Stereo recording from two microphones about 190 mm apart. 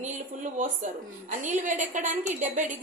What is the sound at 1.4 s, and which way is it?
A woman's voice, 40° right (ahead or behind).